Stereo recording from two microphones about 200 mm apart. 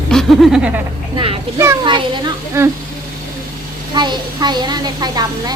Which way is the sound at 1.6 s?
15° right (ahead or behind).